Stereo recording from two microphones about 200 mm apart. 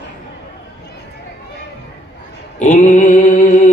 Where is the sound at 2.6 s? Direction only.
35° left (ahead or behind).